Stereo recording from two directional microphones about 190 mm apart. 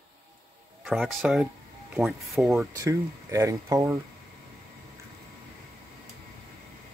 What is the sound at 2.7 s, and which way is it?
Speech, 15° right (ahead or behind).